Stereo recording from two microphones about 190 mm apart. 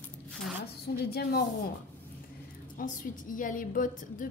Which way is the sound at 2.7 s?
45° left (ahead or behind).